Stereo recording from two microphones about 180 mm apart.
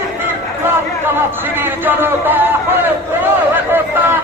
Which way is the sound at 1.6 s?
10° right (ahead or behind).